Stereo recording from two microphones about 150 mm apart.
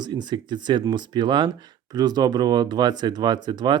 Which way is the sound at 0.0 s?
30° right (ahead or behind).